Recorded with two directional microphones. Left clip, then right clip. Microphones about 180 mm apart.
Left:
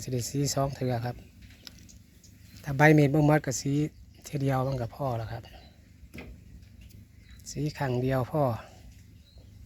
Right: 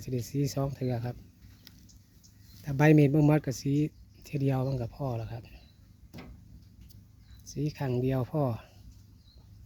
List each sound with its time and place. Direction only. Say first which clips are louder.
0.0 s speech: left 2 dB; 15° right (ahead or behind)
1.7 s a sound: left 7 dB; 15° right (ahead or behind)
2.6 s speech: left 2 dB; 20° right (ahead or behind)
7.4 s speech: left 3 dB; 15° right (ahead or behind)